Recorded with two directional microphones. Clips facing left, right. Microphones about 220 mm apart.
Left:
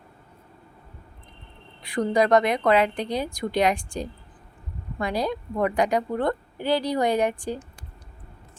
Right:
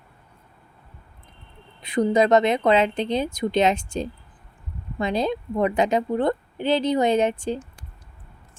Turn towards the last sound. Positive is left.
turn(degrees=-25)  # may be behind; listen again after turning